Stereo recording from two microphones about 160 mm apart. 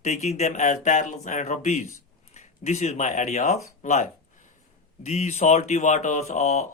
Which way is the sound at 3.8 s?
50° left (ahead or behind).